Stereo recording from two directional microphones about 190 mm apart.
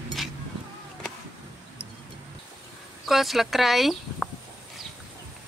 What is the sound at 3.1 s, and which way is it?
Speech, centre (ahead or behind).